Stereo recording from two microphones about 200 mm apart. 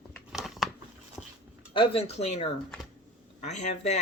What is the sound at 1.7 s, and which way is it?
Speech, 25° left (ahead or behind).